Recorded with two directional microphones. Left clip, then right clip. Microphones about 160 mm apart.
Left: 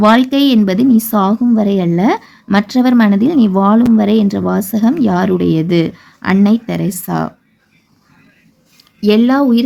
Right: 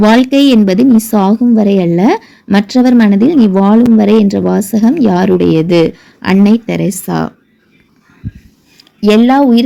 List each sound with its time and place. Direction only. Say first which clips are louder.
0.0 s speech: right 2 dB; 10° right (ahead or behind)
8.8 s speech: right 3 dB; 20° right (ahead or behind)